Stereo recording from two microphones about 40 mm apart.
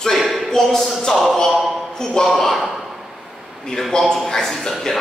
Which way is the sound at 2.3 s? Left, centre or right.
Centre.